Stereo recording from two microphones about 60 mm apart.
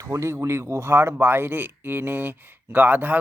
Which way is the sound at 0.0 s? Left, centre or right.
Right.